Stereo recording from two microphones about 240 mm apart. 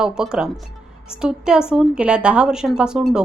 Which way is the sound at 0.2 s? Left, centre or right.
Centre.